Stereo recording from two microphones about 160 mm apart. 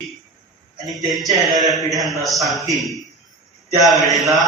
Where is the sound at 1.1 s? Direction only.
20° right (ahead or behind).